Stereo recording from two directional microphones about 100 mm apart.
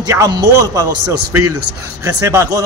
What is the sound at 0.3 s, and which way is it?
A man's voice, 40° right (ahead or behind).